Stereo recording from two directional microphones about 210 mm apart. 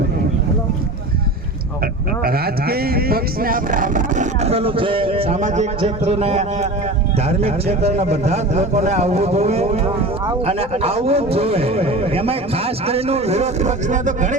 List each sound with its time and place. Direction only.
2.2 s a man's voice: 45° right (ahead or behind)